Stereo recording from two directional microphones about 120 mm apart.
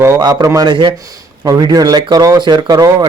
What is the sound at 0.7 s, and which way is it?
A man's voice, 40° right (ahead or behind).